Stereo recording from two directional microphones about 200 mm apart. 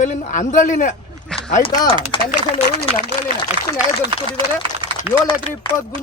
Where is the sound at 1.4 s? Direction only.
25° left (ahead or behind).